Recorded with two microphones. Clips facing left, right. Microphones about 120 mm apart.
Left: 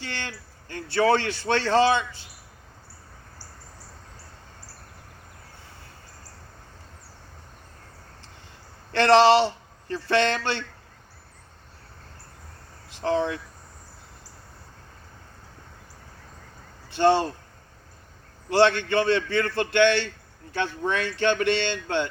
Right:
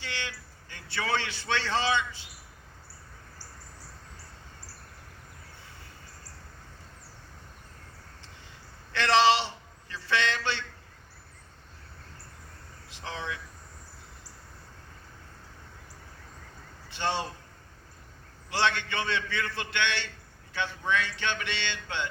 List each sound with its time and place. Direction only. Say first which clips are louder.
0.0 s a man's voice: left 3 dB; 45° left (ahead or behind)
8.9 s a man's voice: left 6 dB; 50° left (ahead or behind)
9.9 s a man's voice: left 7 dB; 45° left (ahead or behind)
13.0 s a man's voice: left 13 dB; 45° left (ahead or behind)
17.0 s a man's voice: left 11 dB; 45° left (ahead or behind)
18.4 s a man's voice: left 9 dB; 45° left (ahead or behind)